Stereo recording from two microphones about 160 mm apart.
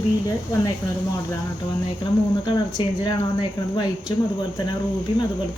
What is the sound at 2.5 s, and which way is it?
Speech, 30° left (ahead or behind).